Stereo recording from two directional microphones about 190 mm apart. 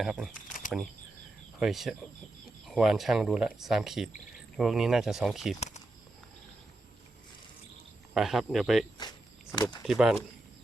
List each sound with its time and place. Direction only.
0.0 s speech: centre (ahead or behind)
0.3 s camera: 45° left (ahead or behind)
1.5 s speech: centre (ahead or behind)
5.5 s a sound: 35° left (ahead or behind)
8.1 s speech: centre (ahead or behind)
9.6 s speech: 20° left (ahead or behind)
9.8 s speech: centre (ahead or behind)